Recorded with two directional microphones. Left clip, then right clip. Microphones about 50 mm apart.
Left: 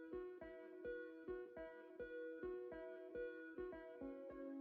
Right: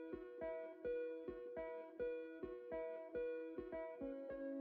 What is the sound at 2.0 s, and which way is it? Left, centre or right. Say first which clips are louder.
Music: right 9 dB; right.